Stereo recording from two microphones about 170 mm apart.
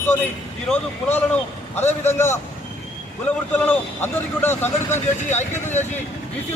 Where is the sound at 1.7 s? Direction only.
15° left (ahead or behind).